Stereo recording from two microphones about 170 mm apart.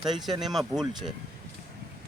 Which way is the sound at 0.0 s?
Centre (ahead or behind).